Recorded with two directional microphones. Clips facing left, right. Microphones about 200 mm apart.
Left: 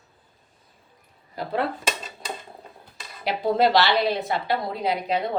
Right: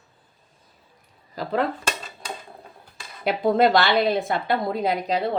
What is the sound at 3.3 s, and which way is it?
A woman's voice, 50° right (ahead or behind).